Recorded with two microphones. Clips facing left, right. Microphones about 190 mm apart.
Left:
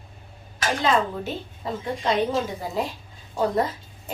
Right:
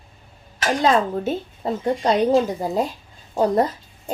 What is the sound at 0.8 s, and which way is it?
A woman's voice, 40° right (ahead or behind).